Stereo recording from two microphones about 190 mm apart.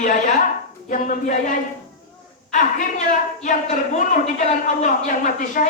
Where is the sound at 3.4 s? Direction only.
40° left (ahead or behind).